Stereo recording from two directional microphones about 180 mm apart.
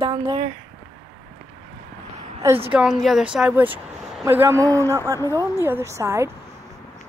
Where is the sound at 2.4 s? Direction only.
10° right (ahead or behind).